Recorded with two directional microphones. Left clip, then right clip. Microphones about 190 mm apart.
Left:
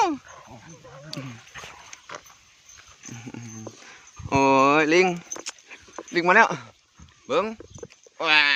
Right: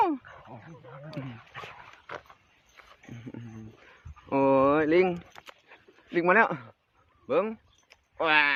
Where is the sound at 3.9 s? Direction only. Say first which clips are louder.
Left 5 dB; 25° left (ahead or behind).